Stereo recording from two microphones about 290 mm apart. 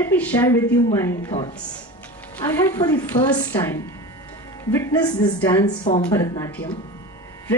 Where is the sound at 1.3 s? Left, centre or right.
Left.